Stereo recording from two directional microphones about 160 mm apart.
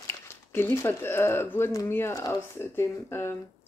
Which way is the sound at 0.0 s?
15° left (ahead or behind).